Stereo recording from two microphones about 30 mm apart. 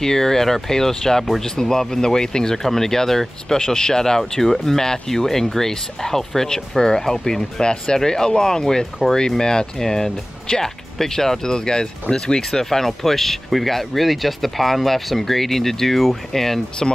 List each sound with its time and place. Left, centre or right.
0.0 s speech: centre
3.5 s speech: left
4.2 s speech: centre